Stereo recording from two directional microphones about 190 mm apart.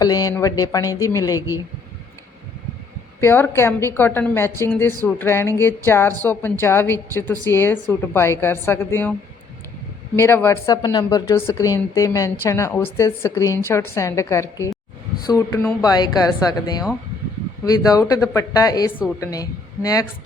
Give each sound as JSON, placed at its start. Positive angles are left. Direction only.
{"t": 0.0, "sound": "speech", "side_deg": 20}
{"t": 3.2, "sound": "a woman's voice", "side_deg": 10}
{"t": 10.2, "sound": "a woman's voice", "side_deg": 15}